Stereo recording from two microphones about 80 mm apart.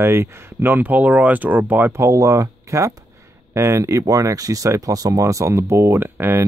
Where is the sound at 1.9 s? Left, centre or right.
Right.